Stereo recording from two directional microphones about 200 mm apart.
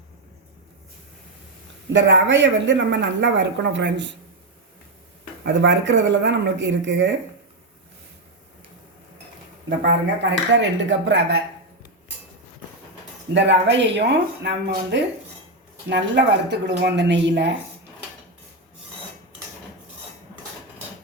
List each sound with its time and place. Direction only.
1.9 s speech: 65° right (ahead or behind)
5.5 s speech: 65° right (ahead or behind)
10.5 s speech: 65° right (ahead or behind)
13.3 s speech: 60° right (ahead or behind)